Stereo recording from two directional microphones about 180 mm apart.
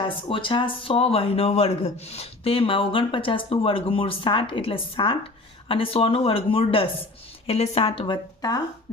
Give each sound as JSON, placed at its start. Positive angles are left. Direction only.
{"t": 0.0, "sound": "speech", "side_deg": 25}